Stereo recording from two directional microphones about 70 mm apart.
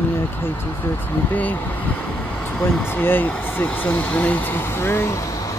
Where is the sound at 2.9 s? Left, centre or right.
Left.